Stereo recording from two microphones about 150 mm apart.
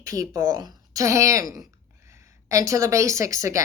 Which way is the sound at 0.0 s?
20° right (ahead or behind).